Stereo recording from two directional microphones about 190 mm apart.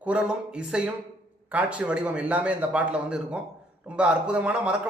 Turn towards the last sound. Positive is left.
turn(degrees=-5)  # may be behind; listen again after turning